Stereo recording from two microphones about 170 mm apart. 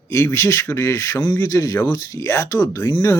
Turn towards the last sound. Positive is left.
turn(degrees=20)  # may be behind; listen again after turning